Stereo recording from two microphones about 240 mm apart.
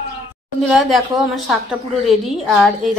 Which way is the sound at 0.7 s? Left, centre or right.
Centre.